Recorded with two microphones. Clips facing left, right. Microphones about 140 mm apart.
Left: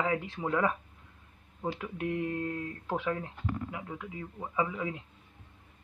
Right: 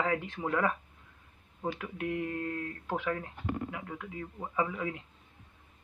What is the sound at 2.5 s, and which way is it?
Speech, 10° left (ahead or behind).